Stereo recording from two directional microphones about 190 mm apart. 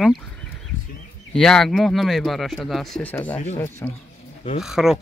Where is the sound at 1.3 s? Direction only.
5° left (ahead or behind).